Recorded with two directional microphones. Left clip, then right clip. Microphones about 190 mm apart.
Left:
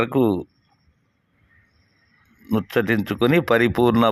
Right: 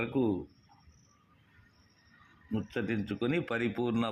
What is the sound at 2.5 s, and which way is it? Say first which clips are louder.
Speech: left 14 dB; 60° left (ahead or behind).